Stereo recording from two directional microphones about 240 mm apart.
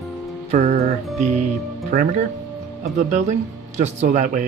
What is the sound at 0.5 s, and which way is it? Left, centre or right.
Speech, right.